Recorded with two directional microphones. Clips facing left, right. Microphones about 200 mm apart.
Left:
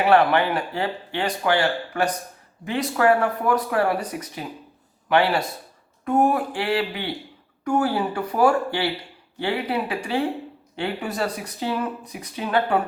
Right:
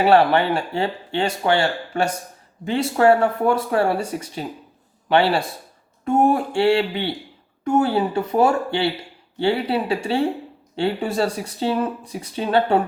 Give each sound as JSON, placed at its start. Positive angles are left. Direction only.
{"t": 0.0, "sound": "a man's voice", "side_deg": -30}